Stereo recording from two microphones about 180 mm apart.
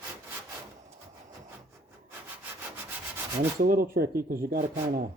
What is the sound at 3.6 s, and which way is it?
Speech, 55° right (ahead or behind).